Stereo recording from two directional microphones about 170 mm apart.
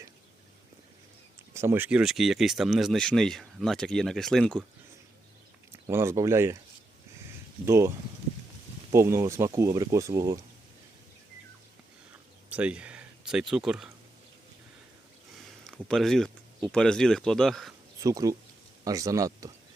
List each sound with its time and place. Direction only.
1.5 s speech: 15° right (ahead or behind); by 4.6 s 5° left (ahead or behind)
5.7 s speech: 15° right (ahead or behind)
7.6 s speech: 15° right (ahead or behind)
12.5 s speech: 10° right (ahead or behind)
15.4 s speech: centre (ahead or behind)
18.0 s speech: 20° right (ahead or behind)